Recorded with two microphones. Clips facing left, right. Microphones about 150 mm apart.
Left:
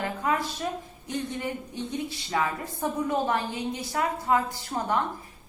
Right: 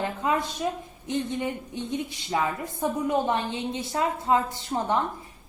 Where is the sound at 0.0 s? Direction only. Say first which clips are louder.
Right 1 dB; 20° right (ahead or behind).